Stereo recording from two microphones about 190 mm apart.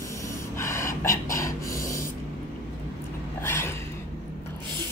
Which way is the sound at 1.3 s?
15° left (ahead or behind).